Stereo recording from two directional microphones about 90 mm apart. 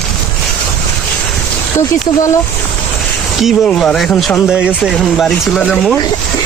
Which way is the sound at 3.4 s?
5° left (ahead or behind).